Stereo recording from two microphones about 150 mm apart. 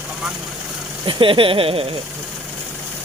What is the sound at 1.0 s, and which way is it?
Speech, 35° right (ahead or behind).